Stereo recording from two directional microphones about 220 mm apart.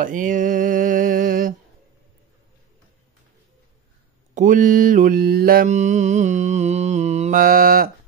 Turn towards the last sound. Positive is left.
turn(degrees=-40)  # may be behind; listen again after turning